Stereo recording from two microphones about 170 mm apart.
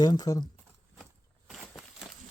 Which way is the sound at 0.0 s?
25° left (ahead or behind).